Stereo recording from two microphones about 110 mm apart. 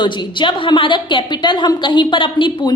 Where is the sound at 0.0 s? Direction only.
45° left (ahead or behind).